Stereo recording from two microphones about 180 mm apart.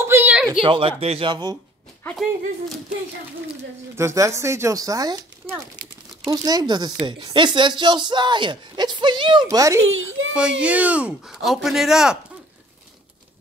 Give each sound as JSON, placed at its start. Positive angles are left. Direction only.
{"t": 0.1, "sound": "a sound", "side_deg": -10}
{"t": 0.6, "sound": "speech", "side_deg": -30}
{"t": 3.9, "sound": "speech", "side_deg": -15}
{"t": 9.8, "sound": "a child's voice", "side_deg": -90}
{"t": 10.3, "sound": "speech", "side_deg": -5}